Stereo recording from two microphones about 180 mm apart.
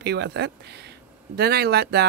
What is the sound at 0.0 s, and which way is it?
Speech, 70° right (ahead or behind).